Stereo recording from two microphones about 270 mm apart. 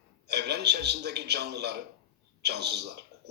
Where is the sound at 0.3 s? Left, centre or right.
Right.